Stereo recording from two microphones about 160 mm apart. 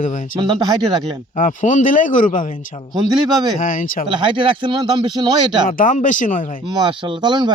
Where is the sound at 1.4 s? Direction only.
50° left (ahead or behind).